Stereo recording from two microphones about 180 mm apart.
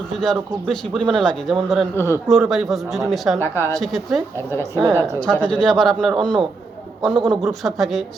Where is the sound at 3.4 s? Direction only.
15° left (ahead or behind).